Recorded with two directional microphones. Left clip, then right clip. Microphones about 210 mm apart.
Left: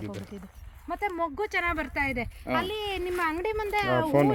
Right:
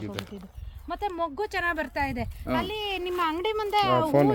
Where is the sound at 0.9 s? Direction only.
5° left (ahead or behind).